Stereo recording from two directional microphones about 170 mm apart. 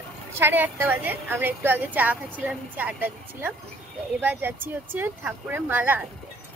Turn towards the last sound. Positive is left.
turn(degrees=-10)  # may be behind; listen again after turning